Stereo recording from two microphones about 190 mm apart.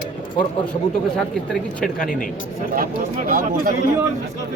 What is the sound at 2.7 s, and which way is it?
Speech, 45° right (ahead or behind).